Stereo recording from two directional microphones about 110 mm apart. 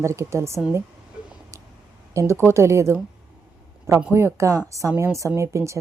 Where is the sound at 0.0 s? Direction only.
25° right (ahead or behind).